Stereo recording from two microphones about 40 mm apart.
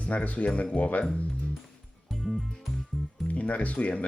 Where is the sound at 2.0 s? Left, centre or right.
Centre.